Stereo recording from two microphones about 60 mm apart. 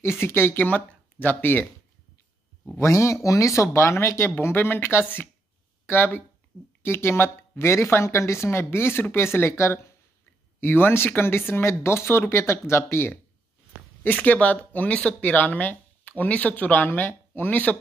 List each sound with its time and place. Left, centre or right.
0.0 s speech: left
0.7 s speech: left
2.8 s speech: left
10.6 s speech: left
14.0 s speech: left